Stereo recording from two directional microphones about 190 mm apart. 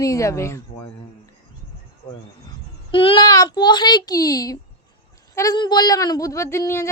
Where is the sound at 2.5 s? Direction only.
25° left (ahead or behind).